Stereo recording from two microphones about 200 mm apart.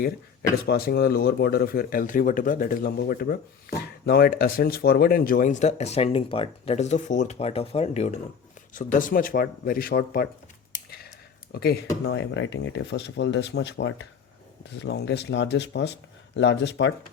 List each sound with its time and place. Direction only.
0.6 s speech: 50° left (ahead or behind)
11.5 s speech: 50° left (ahead or behind)
12.0 s speech: 65° left (ahead or behind)